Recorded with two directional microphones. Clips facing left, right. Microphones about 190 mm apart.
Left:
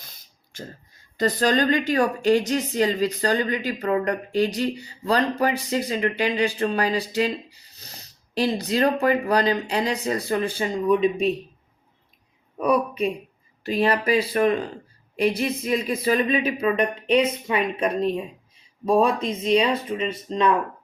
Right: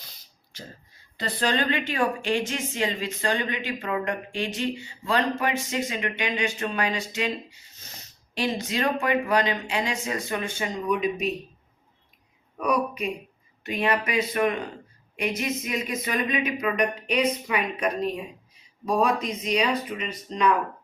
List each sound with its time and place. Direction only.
0.5 s a sound: 50° left (ahead or behind)
1.1 s speech: 40° left (ahead or behind)
12.6 s speech: 30° left (ahead or behind)